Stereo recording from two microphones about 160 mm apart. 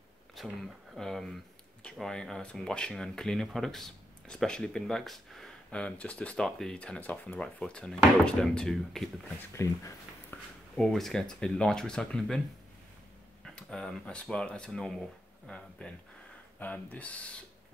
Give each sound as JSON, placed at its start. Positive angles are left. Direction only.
{"t": 0.4, "sound": "speech", "side_deg": 0}
{"t": 9.6, "sound": "a sound", "side_deg": 15}
{"t": 10.8, "sound": "speech", "side_deg": 0}
{"t": 13.6, "sound": "speech", "side_deg": 5}